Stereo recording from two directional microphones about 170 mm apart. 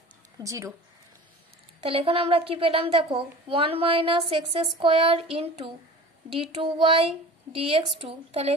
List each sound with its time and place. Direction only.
0.4 s speech: 20° right (ahead or behind)
1.8 s a woman's voice: 35° right (ahead or behind)